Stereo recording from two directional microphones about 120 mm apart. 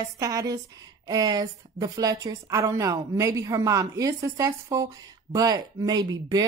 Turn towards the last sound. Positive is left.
turn(degrees=-35)  # may be behind; listen again after turning